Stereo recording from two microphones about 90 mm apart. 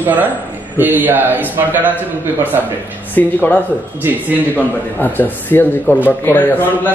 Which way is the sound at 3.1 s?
20° left (ahead or behind).